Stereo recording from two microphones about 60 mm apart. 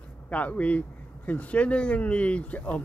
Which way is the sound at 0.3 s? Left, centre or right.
Left.